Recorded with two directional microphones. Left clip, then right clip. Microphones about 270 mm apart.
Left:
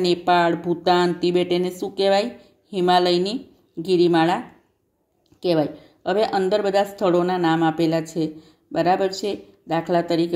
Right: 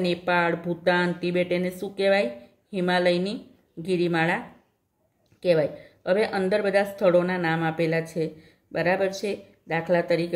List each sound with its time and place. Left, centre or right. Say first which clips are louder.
0.0 s a woman's voice: left 5 dB; centre
5.4 s a woman's voice: left 1 dB; centre